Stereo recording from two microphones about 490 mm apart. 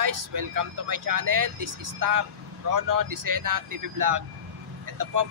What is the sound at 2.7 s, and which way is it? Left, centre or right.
Speech, right.